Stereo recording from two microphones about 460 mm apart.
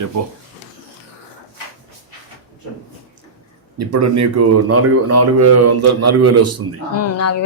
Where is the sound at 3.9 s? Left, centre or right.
Right.